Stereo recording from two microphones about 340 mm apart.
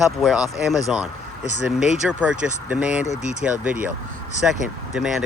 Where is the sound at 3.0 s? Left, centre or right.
Centre.